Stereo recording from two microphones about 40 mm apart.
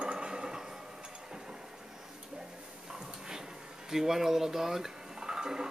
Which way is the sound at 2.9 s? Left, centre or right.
Centre.